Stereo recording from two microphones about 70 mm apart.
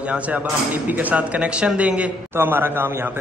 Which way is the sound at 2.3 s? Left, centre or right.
Right.